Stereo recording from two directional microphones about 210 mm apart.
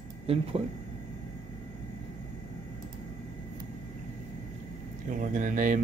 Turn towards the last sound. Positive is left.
turn(degrees=-40)  # may be behind; listen again after turning